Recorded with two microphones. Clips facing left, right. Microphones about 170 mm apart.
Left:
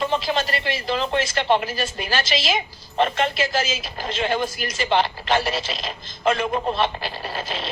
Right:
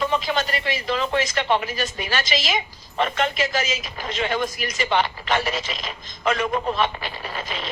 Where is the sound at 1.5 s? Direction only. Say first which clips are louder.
Left 2 dB; 30° left (ahead or behind).